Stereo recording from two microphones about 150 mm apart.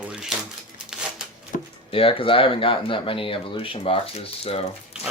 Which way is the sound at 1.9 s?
40° left (ahead or behind).